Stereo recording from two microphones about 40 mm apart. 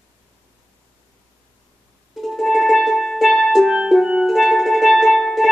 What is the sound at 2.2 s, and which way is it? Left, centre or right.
Music, centre.